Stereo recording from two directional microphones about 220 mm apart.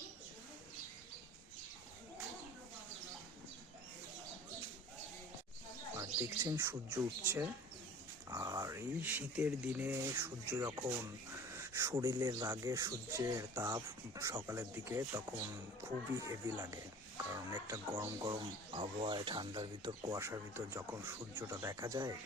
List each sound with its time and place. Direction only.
6.0 s speech: 10° right (ahead or behind)